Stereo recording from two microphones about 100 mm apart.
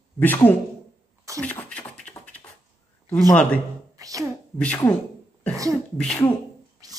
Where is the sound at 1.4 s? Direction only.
10° left (ahead or behind).